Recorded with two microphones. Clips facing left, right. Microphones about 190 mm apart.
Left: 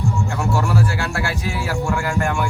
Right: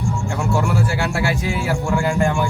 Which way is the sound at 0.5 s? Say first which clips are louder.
Right 1 dB; 20° right (ahead or behind).